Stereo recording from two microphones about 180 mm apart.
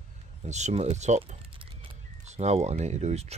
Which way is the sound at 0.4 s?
40° right (ahead or behind).